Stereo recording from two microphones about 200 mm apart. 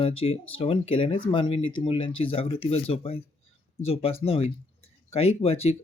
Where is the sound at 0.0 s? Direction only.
30° left (ahead or behind).